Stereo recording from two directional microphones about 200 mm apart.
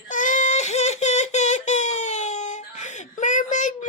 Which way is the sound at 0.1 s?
40° left (ahead or behind).